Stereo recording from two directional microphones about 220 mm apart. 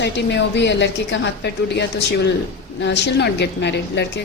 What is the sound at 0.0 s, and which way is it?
A woman's voice, 50° left (ahead or behind).